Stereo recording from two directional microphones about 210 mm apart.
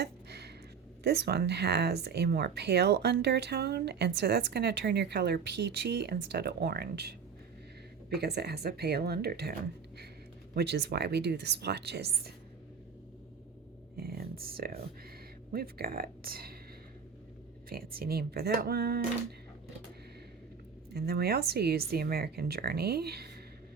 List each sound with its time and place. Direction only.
0.0 s a sound: 50° right (ahead or behind)
1.0 s speech: 50° right (ahead or behind)
13.9 s a sound: 45° right (ahead or behind)
15.5 s speech: 45° right (ahead or behind)
17.7 s speech: 45° right (ahead or behind)
20.9 s speech: 50° right (ahead or behind)